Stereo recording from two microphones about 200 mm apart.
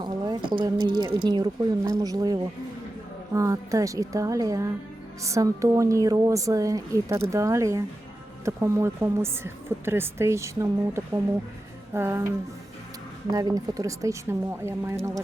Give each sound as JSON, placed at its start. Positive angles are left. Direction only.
{"t": 0.0, "sound": "a woman's voice", "side_deg": -25}
{"t": 13.3, "sound": "a woman's voice", "side_deg": -20}